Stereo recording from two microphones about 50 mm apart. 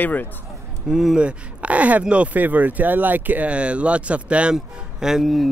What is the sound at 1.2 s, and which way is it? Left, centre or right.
Speech, right.